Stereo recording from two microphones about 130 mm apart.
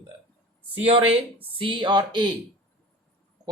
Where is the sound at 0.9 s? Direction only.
45° right (ahead or behind).